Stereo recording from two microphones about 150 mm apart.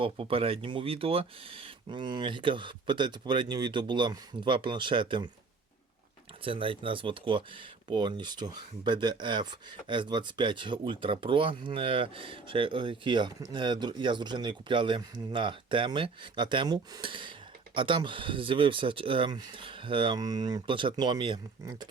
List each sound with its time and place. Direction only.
0.0 s speech: 35° right (ahead or behind)
6.4 s speech: 35° right (ahead or behind)